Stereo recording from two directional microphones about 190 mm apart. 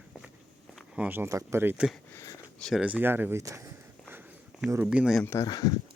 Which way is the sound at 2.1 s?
15° left (ahead or behind).